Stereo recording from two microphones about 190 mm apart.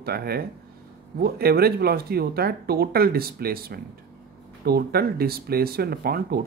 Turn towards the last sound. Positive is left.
turn(degrees=-55)  # may be behind; listen again after turning